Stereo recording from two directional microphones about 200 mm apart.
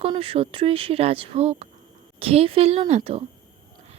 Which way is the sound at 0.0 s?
30° right (ahead or behind).